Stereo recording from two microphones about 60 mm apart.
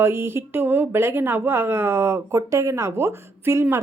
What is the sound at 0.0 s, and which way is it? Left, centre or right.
Speech, right.